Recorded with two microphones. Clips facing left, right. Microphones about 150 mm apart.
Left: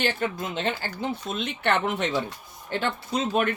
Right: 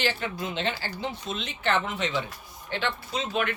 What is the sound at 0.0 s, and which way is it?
Speech, 50° left (ahead or behind).